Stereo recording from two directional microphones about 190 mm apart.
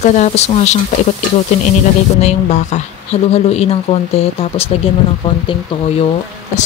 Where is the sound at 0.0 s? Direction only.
40° left (ahead or behind).